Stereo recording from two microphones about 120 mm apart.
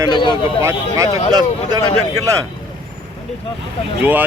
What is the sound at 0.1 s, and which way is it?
Speech, 40° left (ahead or behind).